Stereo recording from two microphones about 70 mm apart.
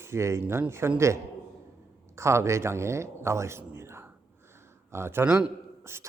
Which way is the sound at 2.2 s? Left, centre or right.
Right.